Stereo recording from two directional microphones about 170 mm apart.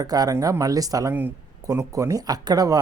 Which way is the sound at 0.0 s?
20° right (ahead or behind).